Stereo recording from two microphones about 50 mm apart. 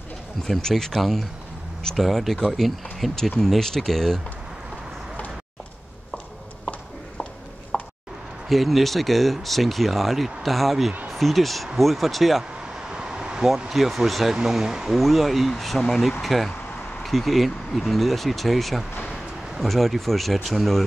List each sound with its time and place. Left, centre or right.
0.4 s speech: centre
2.0 s speech: centre
7.7 s a sound: centre
8.5 s speech: centre
12.9 s a sound: centre
13.7 s speech: centre